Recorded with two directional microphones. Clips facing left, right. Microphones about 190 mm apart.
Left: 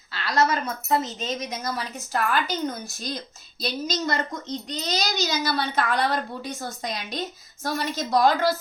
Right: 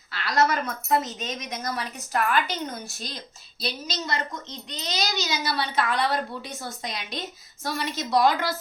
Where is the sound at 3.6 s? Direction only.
45° left (ahead or behind).